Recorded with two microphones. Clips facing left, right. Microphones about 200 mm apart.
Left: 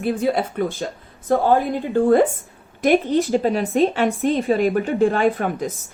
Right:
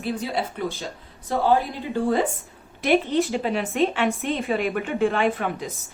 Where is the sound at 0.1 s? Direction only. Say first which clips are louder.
Left 6 dB; 50° left (ahead or behind).